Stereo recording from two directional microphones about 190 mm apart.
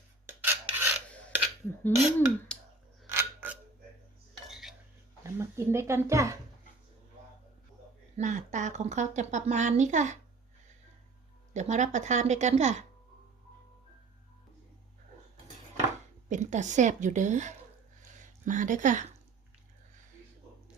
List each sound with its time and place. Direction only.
0.3 s filing: 10° right (ahead or behind)
1.9 s speech: 10° left (ahead or behind)
2.5 s clicking: 5° left (ahead or behind)
3.1 s a sound: 10° right (ahead or behind)
4.4 s cutlery: centre (ahead or behind)
5.2 s speech: 15° right (ahead or behind)
8.1 s a woman's voice: 40° right (ahead or behind)
11.5 s a woman's voice: 40° right (ahead or behind)
16.3 s a woman's voice: 40° right (ahead or behind)